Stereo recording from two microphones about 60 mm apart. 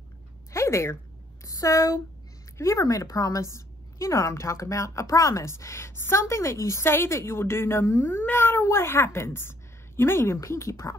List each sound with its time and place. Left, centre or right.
0.5 s a sound: left
1.4 s speech: left
3.5 s a woman's voice: left